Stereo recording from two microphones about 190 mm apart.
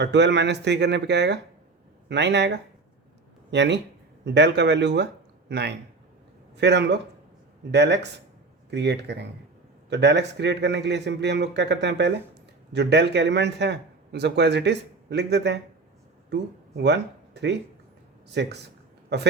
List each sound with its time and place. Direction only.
0.0 s speech: 65° right (ahead or behind)